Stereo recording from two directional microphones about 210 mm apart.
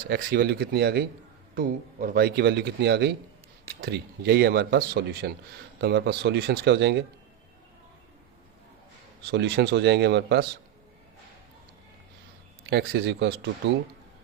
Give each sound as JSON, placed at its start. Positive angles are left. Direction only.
{"t": 0.1, "sound": "a man's voice", "side_deg": -45}
{"t": 9.2, "sound": "a man's voice", "side_deg": -55}
{"t": 12.6, "sound": "a man's voice", "side_deg": -50}